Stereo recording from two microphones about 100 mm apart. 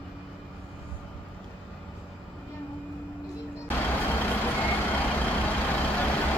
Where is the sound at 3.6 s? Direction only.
20° left (ahead or behind).